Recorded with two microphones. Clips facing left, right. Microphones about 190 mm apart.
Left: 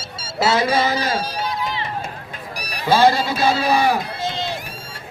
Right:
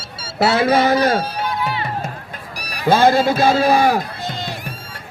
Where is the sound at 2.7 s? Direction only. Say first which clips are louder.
Right 2 dB; 50° right (ahead or behind).